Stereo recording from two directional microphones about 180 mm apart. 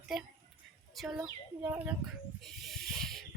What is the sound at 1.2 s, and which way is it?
Speech, 10° right (ahead or behind).